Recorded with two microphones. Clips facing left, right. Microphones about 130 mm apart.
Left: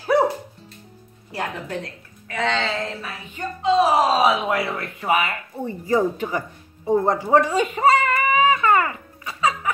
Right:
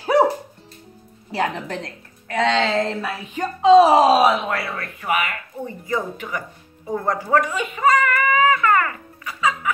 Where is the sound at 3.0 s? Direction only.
90° right.